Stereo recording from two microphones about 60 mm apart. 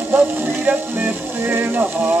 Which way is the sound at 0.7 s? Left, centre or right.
Right.